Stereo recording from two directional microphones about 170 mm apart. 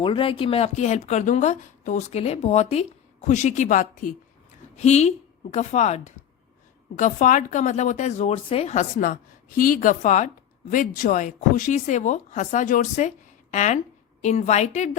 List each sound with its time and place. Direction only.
0.0 s a woman's voice: 30° left (ahead or behind)